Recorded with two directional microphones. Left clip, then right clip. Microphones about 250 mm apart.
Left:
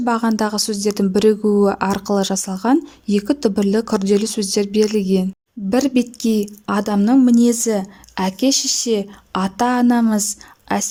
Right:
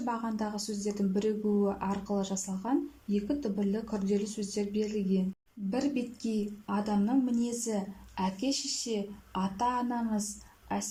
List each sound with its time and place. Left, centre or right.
0.0 s speech: left